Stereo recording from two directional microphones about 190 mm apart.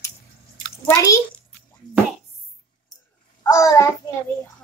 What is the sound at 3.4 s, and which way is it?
Speech, 15° left (ahead or behind).